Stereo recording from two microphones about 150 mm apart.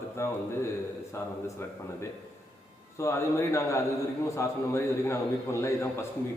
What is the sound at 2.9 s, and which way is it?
A man's voice, 20° left (ahead or behind).